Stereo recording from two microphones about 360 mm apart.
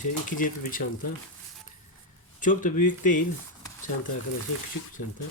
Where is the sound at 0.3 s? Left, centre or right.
Left.